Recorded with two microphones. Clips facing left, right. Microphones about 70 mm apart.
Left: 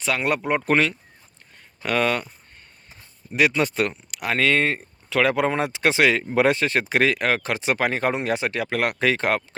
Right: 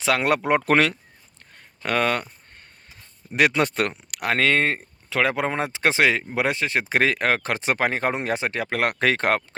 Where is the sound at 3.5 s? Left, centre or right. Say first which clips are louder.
Even; right.